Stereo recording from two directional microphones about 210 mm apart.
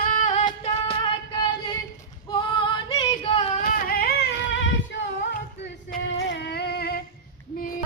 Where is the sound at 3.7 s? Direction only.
45° left (ahead or behind).